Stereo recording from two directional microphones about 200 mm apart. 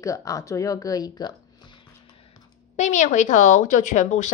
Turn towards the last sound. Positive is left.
turn(degrees=35)  # may be behind; listen again after turning